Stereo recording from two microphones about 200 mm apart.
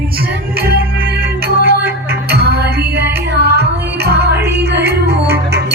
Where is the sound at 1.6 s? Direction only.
55° right (ahead or behind).